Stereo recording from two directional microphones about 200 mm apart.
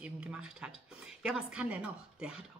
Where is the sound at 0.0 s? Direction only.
5° right (ahead or behind).